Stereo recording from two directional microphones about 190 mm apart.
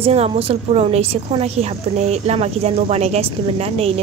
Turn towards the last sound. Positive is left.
turn(degrees=-30)  # may be behind; listen again after turning